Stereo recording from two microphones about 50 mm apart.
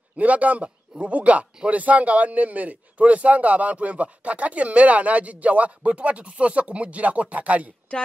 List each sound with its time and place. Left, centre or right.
0.2 s a man's voice: right